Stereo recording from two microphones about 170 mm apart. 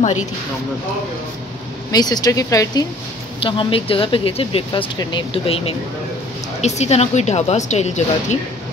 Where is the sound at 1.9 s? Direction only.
25° left (ahead or behind).